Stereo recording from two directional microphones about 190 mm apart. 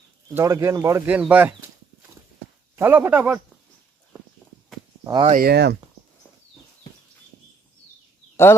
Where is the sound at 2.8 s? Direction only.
10° right (ahead or behind).